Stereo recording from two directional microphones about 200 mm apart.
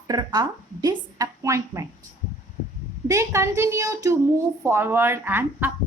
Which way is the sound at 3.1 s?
15° right (ahead or behind).